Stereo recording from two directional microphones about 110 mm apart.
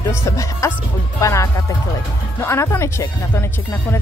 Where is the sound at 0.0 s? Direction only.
25° left (ahead or behind).